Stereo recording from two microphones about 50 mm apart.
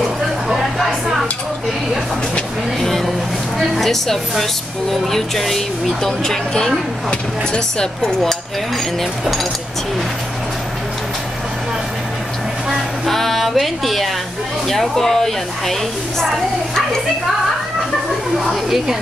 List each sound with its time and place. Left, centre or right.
0.5 s a sound: centre
2.8 s a woman's voice: centre
9.2 s a woman's voice: centre
12.6 s a sound: centre
14.7 s speech: centre
18.5 s a woman's voice: centre